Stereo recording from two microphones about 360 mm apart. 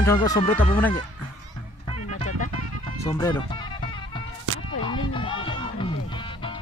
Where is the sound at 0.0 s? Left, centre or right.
Centre.